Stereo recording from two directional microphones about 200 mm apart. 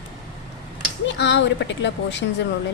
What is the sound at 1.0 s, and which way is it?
Speech, 60° left (ahead or behind).